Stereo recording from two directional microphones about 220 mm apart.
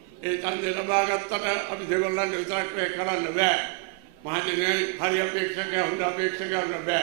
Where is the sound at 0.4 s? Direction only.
15° right (ahead or behind).